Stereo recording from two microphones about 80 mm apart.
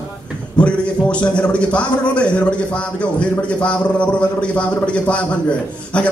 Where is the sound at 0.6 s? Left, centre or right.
Centre.